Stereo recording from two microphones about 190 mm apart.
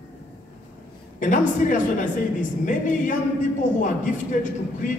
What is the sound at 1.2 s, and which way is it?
A woman's voice, 40° left (ahead or behind).